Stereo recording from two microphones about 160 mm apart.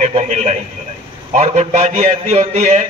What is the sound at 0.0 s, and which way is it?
Radio, 45° right (ahead or behind).